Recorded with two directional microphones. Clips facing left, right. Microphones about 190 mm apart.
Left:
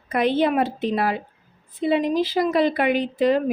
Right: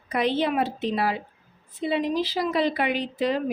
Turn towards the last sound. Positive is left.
turn(degrees=50)  # may be behind; listen again after turning